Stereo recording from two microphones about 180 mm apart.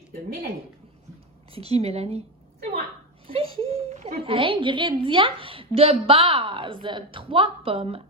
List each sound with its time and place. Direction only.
1.5 s speech: 35° right (ahead or behind)
3.2 s a sound: 30° right (ahead or behind)
4.2 s a woman's voice: 30° right (ahead or behind)